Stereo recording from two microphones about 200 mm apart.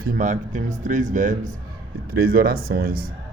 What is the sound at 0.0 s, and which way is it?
A man's voice, 40° right (ahead or behind).